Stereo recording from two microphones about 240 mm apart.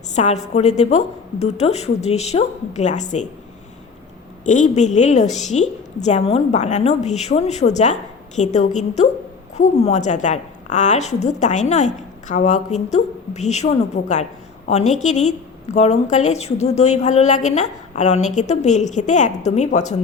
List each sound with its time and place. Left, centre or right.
0.1 s a woman's voice: left
4.4 s a woman's voice: left